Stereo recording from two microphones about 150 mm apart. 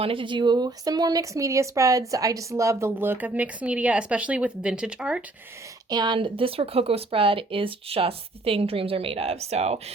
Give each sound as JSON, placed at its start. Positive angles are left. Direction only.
{"t": 0.0, "sound": "speech", "side_deg": -35}
{"t": 5.9, "sound": "speech", "side_deg": -30}